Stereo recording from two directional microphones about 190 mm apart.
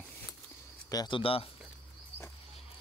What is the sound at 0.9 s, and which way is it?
Speech, 25° left (ahead or behind).